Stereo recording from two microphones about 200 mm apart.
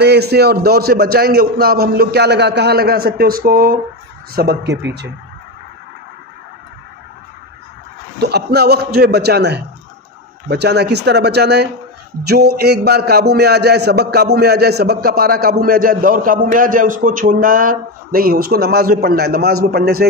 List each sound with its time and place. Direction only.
0.0 s a man's voice: 55° right (ahead or behind)
8.2 s a man's voice: 55° right (ahead or behind)